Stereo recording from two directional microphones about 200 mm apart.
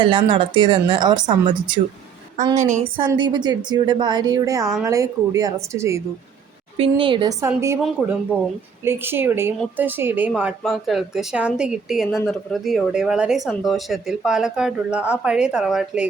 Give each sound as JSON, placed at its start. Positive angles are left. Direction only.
{"t": 0.0, "sound": "speech", "side_deg": -25}
{"t": 2.6, "sound": "a woman's voice", "side_deg": -35}
{"t": 3.0, "sound": "a woman's voice", "side_deg": -20}
{"t": 6.7, "sound": "speech", "side_deg": -25}
{"t": 8.8, "sound": "a woman's voice", "side_deg": -10}